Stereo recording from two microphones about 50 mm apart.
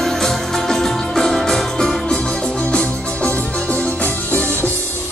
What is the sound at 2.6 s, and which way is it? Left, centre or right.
Music, left.